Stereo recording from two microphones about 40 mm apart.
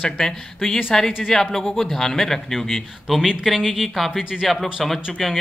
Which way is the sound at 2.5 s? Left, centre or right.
Centre.